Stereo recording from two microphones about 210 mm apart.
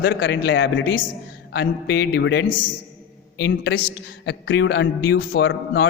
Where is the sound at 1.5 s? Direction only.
50° left (ahead or behind).